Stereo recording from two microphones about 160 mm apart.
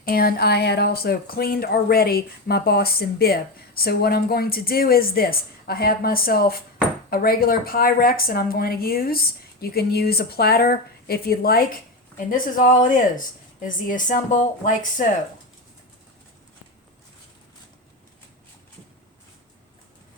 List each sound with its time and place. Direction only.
0.0 s a woman's voice: 70° left (ahead or behind)